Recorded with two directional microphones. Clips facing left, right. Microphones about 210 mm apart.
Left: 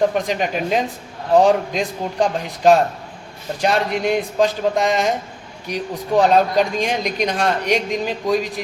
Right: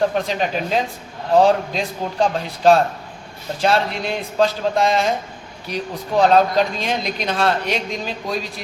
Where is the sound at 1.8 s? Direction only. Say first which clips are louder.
Left 1 dB; 15° left (ahead or behind).